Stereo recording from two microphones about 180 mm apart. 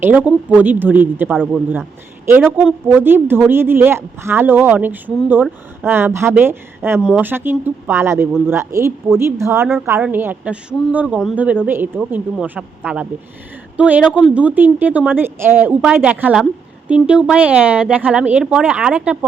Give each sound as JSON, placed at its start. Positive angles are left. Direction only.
{"t": 0.0, "sound": "a woman's voice", "side_deg": -10}